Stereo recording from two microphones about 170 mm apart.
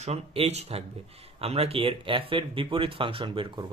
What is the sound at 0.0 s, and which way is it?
Speech, 35° right (ahead or behind).